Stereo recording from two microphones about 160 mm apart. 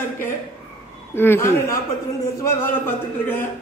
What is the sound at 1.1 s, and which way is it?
Speech, 15° left (ahead or behind).